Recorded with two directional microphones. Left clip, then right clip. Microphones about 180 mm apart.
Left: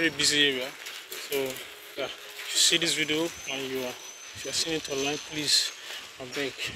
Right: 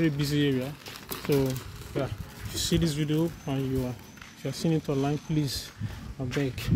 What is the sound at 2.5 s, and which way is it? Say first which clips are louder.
Speech: left 6 dB; 25° right (ahead or behind).